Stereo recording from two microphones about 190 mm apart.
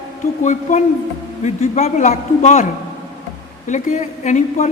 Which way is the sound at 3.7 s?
40° left (ahead or behind).